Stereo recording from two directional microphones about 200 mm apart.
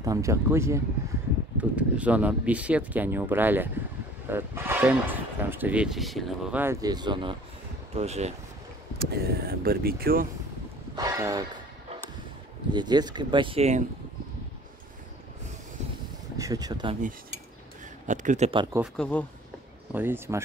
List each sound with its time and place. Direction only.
0.0 s a man's voice: 15° right (ahead or behind); by 8.3 s 35° right (ahead or behind)
8.9 s speech: 50° right (ahead or behind)
11.0 s speech: 15° right (ahead or behind)
12.7 s speech: 20° right (ahead or behind)
16.3 s speech: 15° right (ahead or behind)
18.0 s a man's voice: 40° right (ahead or behind)
18.9 s speech: 10° left (ahead or behind)
19.9 s speech: 10° right (ahead or behind)